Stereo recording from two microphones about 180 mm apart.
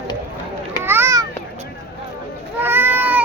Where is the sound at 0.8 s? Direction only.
15° right (ahead or behind).